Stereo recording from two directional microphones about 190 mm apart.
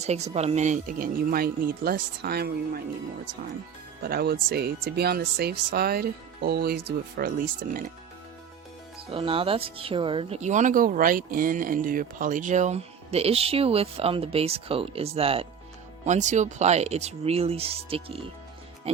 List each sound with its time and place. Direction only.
0.0 s speech: 35° right (ahead or behind); by 2.8 s 55° right (ahead or behind)
4.0 s speech: 55° right (ahead or behind)
9.0 s speech: 30° right (ahead or behind)